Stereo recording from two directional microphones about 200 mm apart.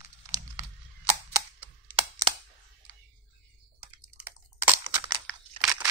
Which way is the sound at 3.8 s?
10° right (ahead or behind).